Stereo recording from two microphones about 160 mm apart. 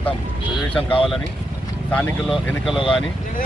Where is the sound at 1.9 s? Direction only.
5° left (ahead or behind).